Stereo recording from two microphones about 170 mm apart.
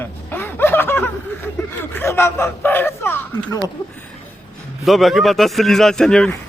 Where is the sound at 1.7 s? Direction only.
10° left (ahead or behind).